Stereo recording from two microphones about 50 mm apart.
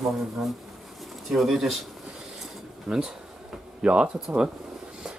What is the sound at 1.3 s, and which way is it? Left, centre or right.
Speech, centre.